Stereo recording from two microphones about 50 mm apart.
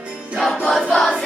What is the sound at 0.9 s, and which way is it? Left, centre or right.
Choir, centre.